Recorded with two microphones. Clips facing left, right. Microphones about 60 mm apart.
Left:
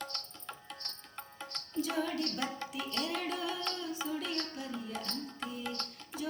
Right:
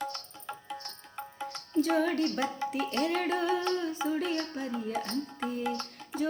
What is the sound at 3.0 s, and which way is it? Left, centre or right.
Music, right.